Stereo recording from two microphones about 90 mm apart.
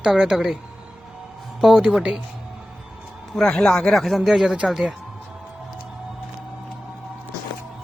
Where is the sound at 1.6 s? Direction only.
10° right (ahead or behind).